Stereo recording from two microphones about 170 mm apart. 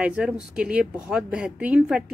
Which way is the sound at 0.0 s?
5° right (ahead or behind).